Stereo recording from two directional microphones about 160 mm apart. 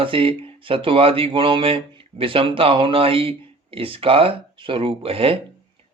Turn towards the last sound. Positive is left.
turn(degrees=-35)  # may be behind; listen again after turning